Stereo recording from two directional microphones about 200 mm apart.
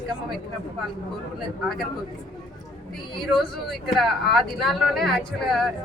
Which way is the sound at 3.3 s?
Centre (ahead or behind).